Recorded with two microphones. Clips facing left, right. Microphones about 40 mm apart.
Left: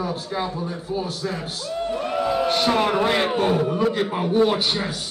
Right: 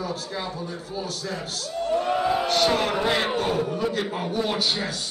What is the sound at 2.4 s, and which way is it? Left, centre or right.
A man's voice, left.